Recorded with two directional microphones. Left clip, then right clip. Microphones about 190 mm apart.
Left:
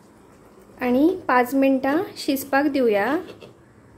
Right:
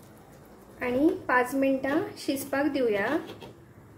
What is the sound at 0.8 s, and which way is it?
A woman's voice, 45° left (ahead or behind).